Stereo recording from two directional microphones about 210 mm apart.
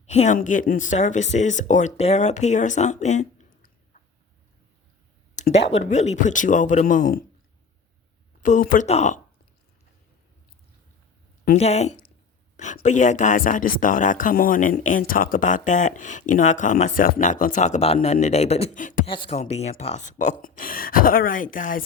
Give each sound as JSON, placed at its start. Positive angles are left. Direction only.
{"t": 0.0, "sound": "speech", "side_deg": 30}
{"t": 5.4, "sound": "speech", "side_deg": 30}
{"t": 8.4, "sound": "speech", "side_deg": 35}
{"t": 11.5, "sound": "speech", "side_deg": 30}
{"t": 19.0, "sound": "speech", "side_deg": 25}